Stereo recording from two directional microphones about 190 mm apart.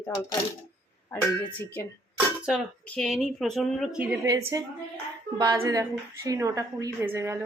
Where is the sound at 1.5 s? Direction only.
10° left (ahead or behind).